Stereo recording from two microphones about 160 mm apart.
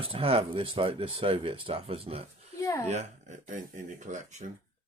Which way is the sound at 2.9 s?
50° right (ahead or behind).